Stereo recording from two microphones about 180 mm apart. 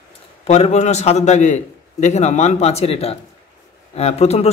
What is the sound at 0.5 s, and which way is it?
Speech, 40° left (ahead or behind).